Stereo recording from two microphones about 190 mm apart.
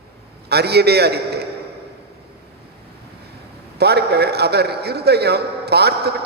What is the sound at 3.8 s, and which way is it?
A man's voice, 60° right (ahead or behind).